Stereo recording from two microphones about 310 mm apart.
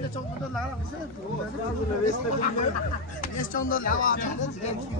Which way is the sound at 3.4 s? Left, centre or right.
Left.